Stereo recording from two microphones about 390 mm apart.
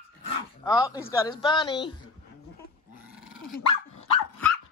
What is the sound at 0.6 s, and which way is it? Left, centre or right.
A woman's voice, centre.